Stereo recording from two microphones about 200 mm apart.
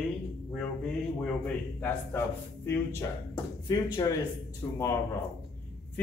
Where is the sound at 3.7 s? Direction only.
20° left (ahead or behind).